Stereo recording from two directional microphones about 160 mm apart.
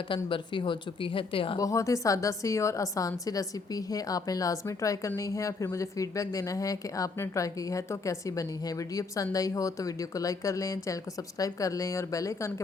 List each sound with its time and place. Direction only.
0.3 s speech: 30° left (ahead or behind)
1.5 s a woman's voice: 20° left (ahead or behind)